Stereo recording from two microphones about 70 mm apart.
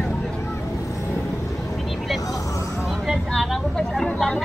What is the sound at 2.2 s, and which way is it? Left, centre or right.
Vehicle, left.